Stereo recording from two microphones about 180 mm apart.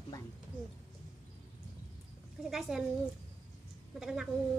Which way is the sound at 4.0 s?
Centre (ahead or behind).